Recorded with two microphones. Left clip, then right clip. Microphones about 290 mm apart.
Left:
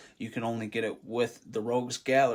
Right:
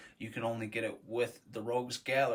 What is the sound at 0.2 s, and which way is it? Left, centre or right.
Speech, centre.